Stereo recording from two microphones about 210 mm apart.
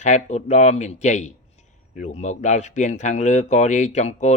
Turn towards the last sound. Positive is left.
turn(degrees=35)  # may be behind; listen again after turning